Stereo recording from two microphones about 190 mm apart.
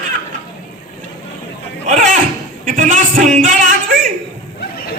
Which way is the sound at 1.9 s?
45° right (ahead or behind).